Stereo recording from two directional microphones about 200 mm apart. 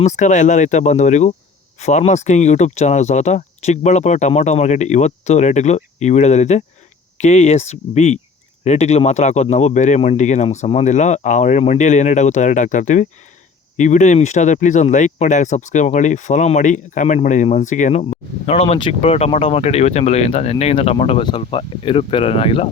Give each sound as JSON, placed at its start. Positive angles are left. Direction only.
{"t": 0.0, "sound": "speech", "side_deg": 35}